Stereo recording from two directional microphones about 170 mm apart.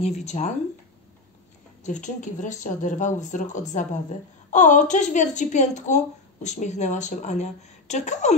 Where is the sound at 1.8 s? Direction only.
45° left (ahead or behind).